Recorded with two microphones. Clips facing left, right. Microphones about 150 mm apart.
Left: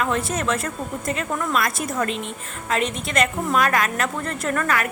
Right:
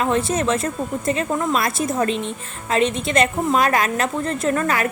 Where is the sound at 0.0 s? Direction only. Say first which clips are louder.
Right 4 dB; 25° right (ahead or behind).